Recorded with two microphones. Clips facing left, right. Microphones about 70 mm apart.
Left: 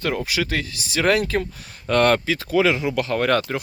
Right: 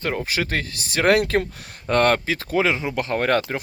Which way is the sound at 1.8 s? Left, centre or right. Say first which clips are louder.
Left 1 dB; right.